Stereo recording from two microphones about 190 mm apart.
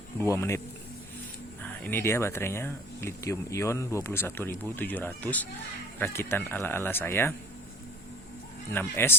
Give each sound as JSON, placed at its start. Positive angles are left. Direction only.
{"t": 0.2, "sound": "speech", "side_deg": 15}
{"t": 1.6, "sound": "speech", "side_deg": 10}
{"t": 8.7, "sound": "speech", "side_deg": 10}